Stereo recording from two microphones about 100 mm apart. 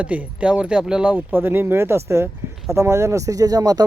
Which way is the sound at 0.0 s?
15° right (ahead or behind).